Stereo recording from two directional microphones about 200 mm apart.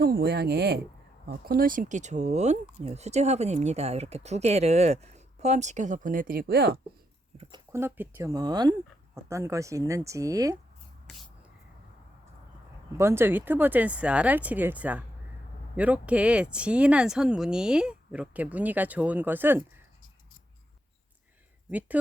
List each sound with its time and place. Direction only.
0.0 s speech: 50° right (ahead or behind)
7.5 s speech: 15° right (ahead or behind)
13.0 s speech: 10° right (ahead or behind)
21.7 s speech: 10° right (ahead or behind)